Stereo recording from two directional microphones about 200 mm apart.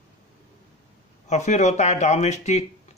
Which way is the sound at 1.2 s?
35° left (ahead or behind).